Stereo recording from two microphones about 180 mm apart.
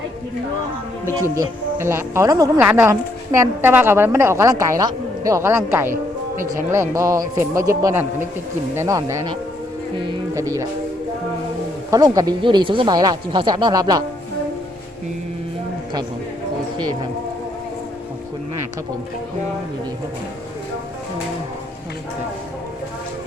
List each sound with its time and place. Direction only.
1.0 s a woman's voice: 15° right (ahead or behind)
11.9 s speech: 20° right (ahead or behind)